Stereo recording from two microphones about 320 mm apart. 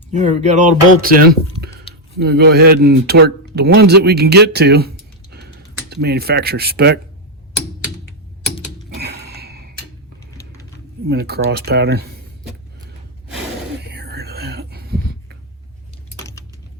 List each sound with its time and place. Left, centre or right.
0.1 s speech: right
5.3 s a sound: right
5.9 s speech: right
9.0 s a sound: right
11.1 s speech: right
13.8 s whispering: right